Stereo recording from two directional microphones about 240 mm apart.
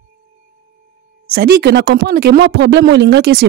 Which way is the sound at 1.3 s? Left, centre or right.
Right.